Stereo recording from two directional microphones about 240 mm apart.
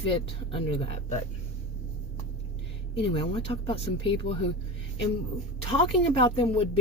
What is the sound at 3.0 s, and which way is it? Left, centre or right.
Speech, left.